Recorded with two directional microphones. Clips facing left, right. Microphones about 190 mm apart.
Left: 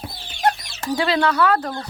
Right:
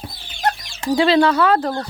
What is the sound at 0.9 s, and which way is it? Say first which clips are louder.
Speech: right 5 dB; 25° right (ahead or behind).